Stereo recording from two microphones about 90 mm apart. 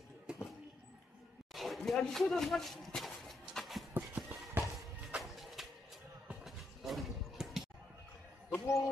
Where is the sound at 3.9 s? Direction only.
20° right (ahead or behind).